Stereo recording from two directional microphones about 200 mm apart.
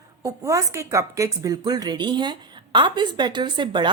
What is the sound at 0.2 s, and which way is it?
A woman's voice, 15° right (ahead or behind).